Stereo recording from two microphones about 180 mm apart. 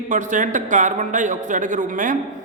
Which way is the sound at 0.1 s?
45° right (ahead or behind).